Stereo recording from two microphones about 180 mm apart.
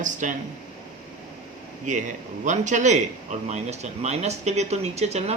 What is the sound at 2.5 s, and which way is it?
Speech, 40° right (ahead or behind).